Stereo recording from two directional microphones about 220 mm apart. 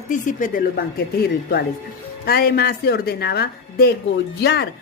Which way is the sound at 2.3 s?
45° left (ahead or behind).